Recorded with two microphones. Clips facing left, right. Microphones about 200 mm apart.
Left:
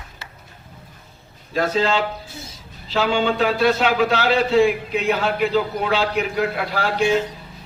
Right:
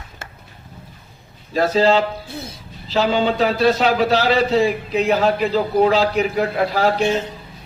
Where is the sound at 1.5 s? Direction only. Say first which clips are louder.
Right 4 dB; 35° right (ahead or behind).